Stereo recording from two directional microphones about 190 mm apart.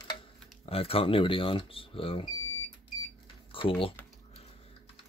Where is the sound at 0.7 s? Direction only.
30° left (ahead or behind).